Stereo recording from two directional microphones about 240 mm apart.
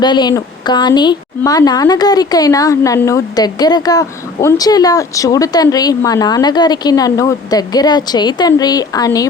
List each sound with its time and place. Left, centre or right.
0.0 s speech: centre